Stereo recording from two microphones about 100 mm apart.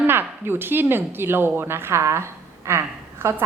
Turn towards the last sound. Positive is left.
turn(degrees=-25)  # may be behind; listen again after turning